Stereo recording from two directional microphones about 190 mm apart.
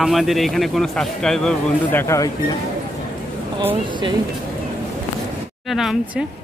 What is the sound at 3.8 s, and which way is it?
Speech, 25° right (ahead or behind).